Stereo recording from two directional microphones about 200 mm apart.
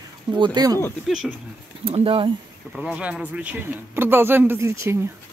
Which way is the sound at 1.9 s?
25° right (ahead or behind).